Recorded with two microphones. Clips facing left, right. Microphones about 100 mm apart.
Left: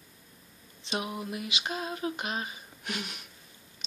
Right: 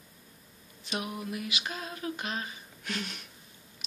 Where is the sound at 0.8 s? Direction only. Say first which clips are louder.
Left 2 dB; 25° left (ahead or behind).